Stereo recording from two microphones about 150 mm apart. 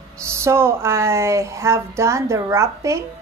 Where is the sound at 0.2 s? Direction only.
20° right (ahead or behind).